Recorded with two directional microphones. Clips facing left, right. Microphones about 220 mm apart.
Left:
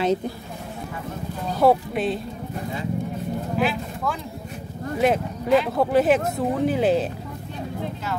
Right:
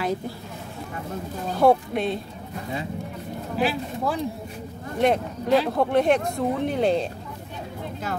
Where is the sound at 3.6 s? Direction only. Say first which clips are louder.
Right 5 dB; 35° right (ahead or behind).